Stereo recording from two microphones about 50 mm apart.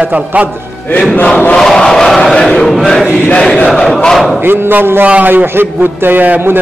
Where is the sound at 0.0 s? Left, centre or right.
Right.